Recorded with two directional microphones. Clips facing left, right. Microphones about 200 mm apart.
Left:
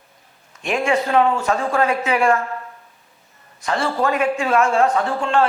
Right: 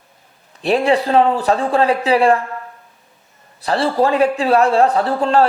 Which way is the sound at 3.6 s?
35° right (ahead or behind).